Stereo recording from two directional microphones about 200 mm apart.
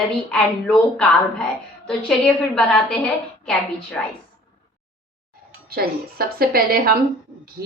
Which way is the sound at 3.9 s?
5° left (ahead or behind).